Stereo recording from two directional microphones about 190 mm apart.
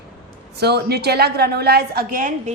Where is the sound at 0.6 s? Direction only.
60° right (ahead or behind).